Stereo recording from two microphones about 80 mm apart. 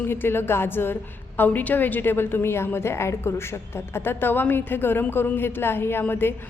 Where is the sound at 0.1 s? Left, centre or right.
Left.